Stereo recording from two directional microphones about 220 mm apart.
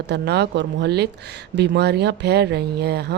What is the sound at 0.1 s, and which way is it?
Speech, 50° right (ahead or behind).